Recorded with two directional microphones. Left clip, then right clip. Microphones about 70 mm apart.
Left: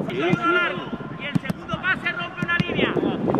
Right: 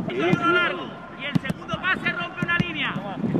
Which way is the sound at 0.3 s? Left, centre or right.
Right.